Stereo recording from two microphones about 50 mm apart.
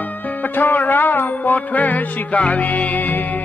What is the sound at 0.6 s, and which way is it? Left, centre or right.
Music, left.